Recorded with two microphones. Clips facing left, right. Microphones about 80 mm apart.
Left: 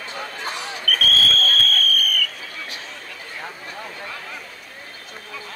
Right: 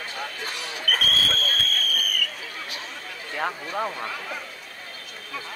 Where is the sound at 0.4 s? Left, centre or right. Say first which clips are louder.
Left 4 dB; left.